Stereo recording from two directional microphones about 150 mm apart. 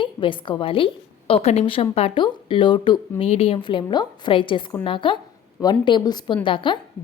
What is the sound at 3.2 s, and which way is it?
A woman's voice, 40° left (ahead or behind).